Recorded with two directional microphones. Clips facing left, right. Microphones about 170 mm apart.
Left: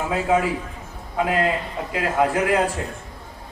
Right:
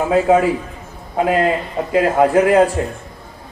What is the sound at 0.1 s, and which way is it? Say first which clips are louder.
A man's voice: right 7 dB; 40° right (ahead or behind).